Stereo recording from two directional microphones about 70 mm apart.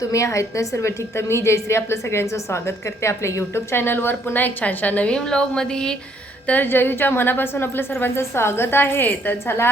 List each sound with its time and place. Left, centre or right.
0.0 s a woman's voice: left; by 6.0 s centre
6.5 s a woman's voice: left